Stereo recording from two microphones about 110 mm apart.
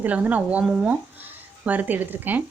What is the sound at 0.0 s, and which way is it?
Speech, 15° right (ahead or behind).